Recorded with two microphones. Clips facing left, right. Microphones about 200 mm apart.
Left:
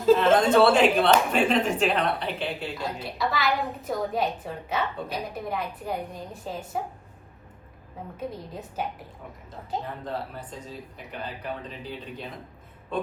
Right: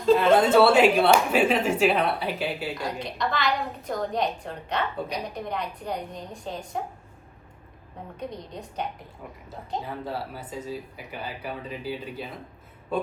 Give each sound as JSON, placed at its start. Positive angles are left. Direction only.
{"t": 0.3, "sound": "speech", "side_deg": -5}
{"t": 2.7, "sound": "a woman's voice", "side_deg": 5}
{"t": 8.1, "sound": "a woman's voice", "side_deg": 5}
{"t": 10.0, "sound": "speech", "side_deg": -5}